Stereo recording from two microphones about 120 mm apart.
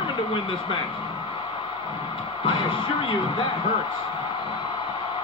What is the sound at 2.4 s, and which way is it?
Speech, 45° left (ahead or behind).